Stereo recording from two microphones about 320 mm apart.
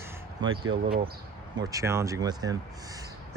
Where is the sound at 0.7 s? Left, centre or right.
Right.